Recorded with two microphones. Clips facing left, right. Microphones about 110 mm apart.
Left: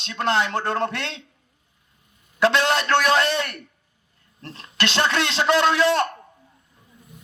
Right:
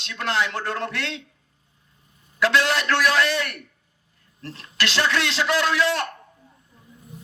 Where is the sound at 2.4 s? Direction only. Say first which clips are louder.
Left 2 dB; 25° left (ahead or behind).